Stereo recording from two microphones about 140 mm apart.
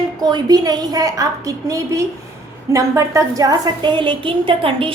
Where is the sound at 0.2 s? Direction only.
30° right (ahead or behind).